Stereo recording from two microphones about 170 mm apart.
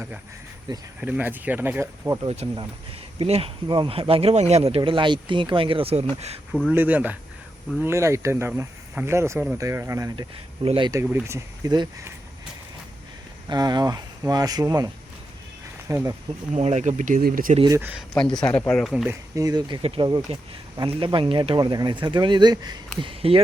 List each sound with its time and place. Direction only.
0.7 s speech: 25° right (ahead or behind)
1.0 s speech: 10° right (ahead or behind)
2.2 s speech: 40° right (ahead or behind)
6.5 s speech: 5° right (ahead or behind)
10.2 s speech: 30° right (ahead or behind)
10.9 s speech: 15° right (ahead or behind)
13.5 s speech: 25° right (ahead or behind)
15.9 s speech: 20° right (ahead or behind)
16.6 s speech: 40° right (ahead or behind)
17.7 s speech: 10° right (ahead or behind)
18.4 s speech: 10° left (ahead or behind)
19.0 s speech: 20° right (ahead or behind)